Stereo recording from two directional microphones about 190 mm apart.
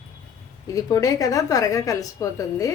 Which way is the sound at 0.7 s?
20° left (ahead or behind).